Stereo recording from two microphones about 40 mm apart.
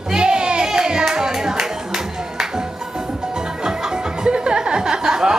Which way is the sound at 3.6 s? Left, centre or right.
Centre.